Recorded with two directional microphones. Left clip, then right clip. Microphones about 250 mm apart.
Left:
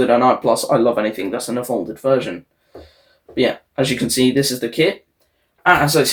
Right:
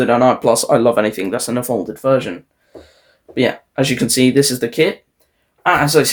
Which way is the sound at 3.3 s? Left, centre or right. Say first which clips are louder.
Right 1 dB; right.